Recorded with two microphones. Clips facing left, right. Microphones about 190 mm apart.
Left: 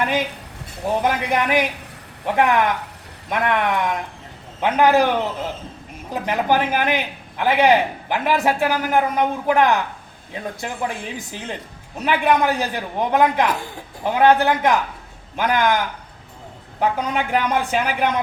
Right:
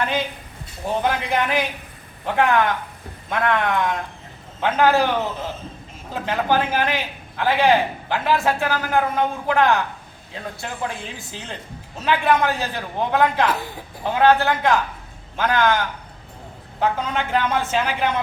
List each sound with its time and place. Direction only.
1.0 s a man's voice: 15° left (ahead or behind)
16.8 s a man's voice: 10° left (ahead or behind)